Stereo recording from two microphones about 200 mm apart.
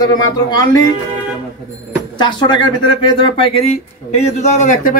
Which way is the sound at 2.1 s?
25° left (ahead or behind).